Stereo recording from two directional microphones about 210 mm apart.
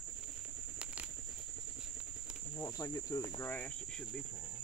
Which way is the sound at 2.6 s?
15° left (ahead or behind).